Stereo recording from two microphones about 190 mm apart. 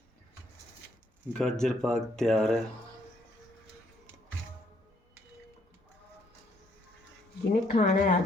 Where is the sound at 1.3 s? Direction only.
5° left (ahead or behind).